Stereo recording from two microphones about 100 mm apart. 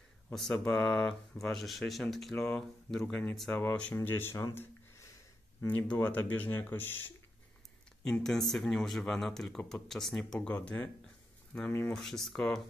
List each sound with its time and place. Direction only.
0.3 s speech: 5° left (ahead or behind)
3.1 s speech: 20° left (ahead or behind)
6.0 s speech: 15° left (ahead or behind)
8.0 s speech: 5° left (ahead or behind)
10.5 s speech: 15° left (ahead or behind)
11.9 s speech: 5° left (ahead or behind)